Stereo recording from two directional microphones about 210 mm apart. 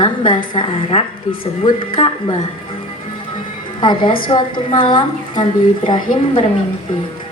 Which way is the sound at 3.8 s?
25° left (ahead or behind).